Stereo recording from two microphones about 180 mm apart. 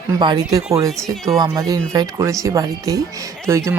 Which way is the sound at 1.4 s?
20° right (ahead or behind).